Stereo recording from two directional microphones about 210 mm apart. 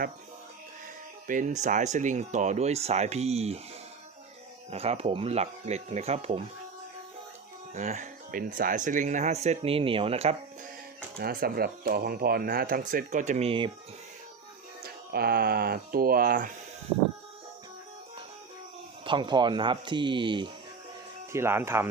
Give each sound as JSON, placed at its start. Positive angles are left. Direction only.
{"t": 1.3, "sound": "speech", "side_deg": -40}
{"t": 4.7, "sound": "speech", "side_deg": -30}
{"t": 7.7, "sound": "speech", "side_deg": -35}
{"t": 11.2, "sound": "speech", "side_deg": -45}
{"t": 14.8, "sound": "speech", "side_deg": -45}
{"t": 19.0, "sound": "speech", "side_deg": -20}
{"t": 21.3, "sound": "speech", "side_deg": -10}